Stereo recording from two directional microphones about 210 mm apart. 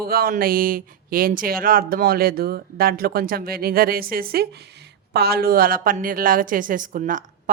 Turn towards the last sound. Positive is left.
turn(degrees=-40)  # may be behind; listen again after turning